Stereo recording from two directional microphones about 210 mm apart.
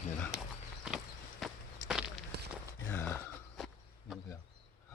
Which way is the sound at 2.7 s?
10° left (ahead or behind).